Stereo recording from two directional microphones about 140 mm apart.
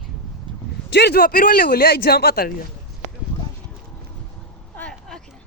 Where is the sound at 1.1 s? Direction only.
90° left.